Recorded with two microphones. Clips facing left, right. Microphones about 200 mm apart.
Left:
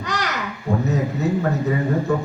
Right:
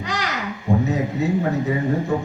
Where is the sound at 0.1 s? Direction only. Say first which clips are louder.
Left 1 dB; 65° left (ahead or behind).